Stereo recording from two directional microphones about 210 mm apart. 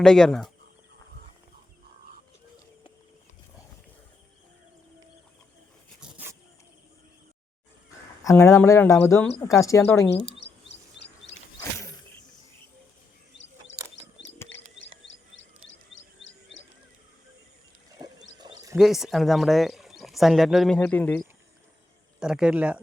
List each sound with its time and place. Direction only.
0.0 s speech: 5° left (ahead or behind)
6.0 s a sound: 10° right (ahead or behind)
8.2 s speech: 15° left (ahead or behind)
10.7 s rub: 55° left (ahead or behind)
13.9 s wild animals: 60° left (ahead or behind)
14.8 s a sound: 60° left (ahead or behind)
18.0 s wild animals: 20° right (ahead or behind)
18.4 s a sound: 20° right (ahead or behind)
18.8 s speech: centre (ahead or behind)
22.2 s speech: 5° right (ahead or behind)